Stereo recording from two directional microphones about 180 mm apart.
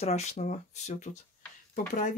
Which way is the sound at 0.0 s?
40° left (ahead or behind).